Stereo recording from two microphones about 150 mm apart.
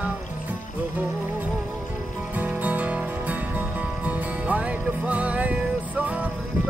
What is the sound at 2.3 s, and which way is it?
Music, 10° right (ahead or behind).